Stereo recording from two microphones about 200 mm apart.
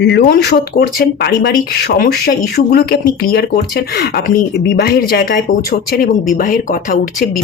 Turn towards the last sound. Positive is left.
turn(degrees=45)  # may be behind; listen again after turning